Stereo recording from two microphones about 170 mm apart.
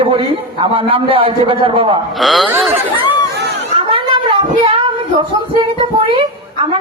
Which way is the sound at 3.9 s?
30° right (ahead or behind).